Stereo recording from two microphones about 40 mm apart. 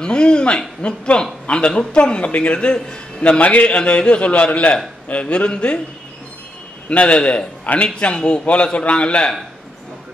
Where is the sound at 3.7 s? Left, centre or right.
Left.